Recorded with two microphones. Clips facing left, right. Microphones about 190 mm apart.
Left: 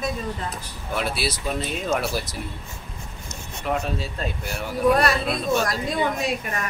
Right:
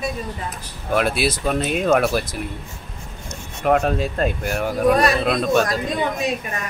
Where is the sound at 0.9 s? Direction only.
55° right (ahead or behind).